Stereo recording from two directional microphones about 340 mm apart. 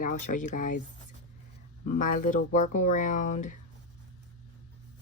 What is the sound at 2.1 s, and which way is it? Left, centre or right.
Speech, left.